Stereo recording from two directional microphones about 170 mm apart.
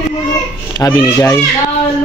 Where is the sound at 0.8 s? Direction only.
20° left (ahead or behind).